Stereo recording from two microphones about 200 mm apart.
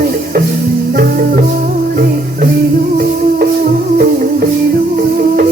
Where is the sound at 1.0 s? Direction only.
45° right (ahead or behind).